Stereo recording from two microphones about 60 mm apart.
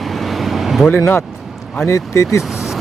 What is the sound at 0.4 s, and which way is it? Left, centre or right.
Vehicle, centre.